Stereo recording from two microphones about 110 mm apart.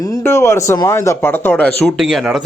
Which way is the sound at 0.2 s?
25° left (ahead or behind).